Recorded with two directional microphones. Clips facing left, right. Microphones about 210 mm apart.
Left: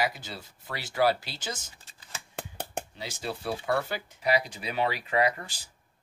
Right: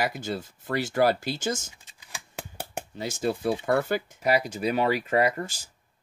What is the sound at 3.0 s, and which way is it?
Speech, 50° right (ahead or behind).